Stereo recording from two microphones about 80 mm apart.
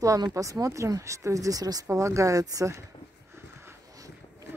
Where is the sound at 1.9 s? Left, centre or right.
Right.